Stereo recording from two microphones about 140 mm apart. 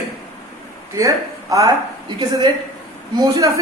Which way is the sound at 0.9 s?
25° right (ahead or behind).